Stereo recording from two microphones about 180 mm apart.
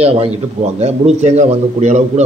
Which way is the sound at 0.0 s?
35° right (ahead or behind).